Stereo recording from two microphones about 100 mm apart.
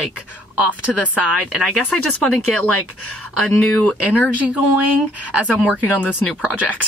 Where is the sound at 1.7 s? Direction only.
10° left (ahead or behind).